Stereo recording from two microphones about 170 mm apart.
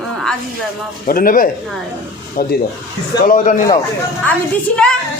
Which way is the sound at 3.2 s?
50° left (ahead or behind).